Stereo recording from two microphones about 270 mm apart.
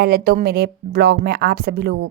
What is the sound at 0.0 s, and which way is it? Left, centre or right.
A woman's voice, right.